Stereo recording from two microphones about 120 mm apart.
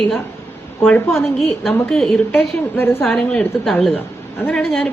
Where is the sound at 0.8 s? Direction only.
15° left (ahead or behind).